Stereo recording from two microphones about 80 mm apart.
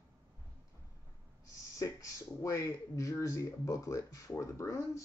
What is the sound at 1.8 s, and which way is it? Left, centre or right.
Speech, left.